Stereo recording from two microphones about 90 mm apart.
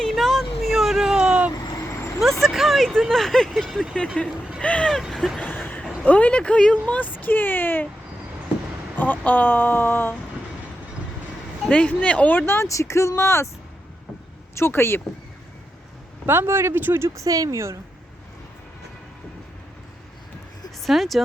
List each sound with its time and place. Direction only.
0.0 s a sound: 5° left (ahead or behind)
2.4 s speech: centre (ahead or behind)
5.0 s speech: 5° right (ahead or behind)
5.4 s a sound: 20° left (ahead or behind)
6.1 s speech: 15° left (ahead or behind)
9.0 s speech: 20° left (ahead or behind)
11.7 s speech: 15° left (ahead or behind); by 13.5 s 30° left (ahead or behind)
14.5 s speech: 30° left (ahead or behind)
16.2 s speech: 25° right (ahead or behind)
17.2 s speech: 40° right (ahead or behind)
20.8 s speech: centre (ahead or behind)